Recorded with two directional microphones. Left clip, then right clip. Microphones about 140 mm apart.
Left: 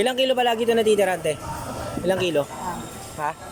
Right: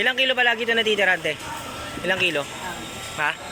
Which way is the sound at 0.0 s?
25° left (ahead or behind).